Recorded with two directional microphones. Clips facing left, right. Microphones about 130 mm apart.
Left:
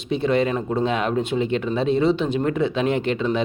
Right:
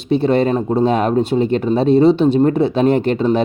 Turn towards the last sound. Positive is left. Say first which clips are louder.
# right 7 dB
turn(degrees=-40)  # may be behind; listen again after turning